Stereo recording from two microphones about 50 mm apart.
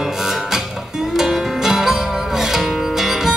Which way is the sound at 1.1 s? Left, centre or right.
Centre.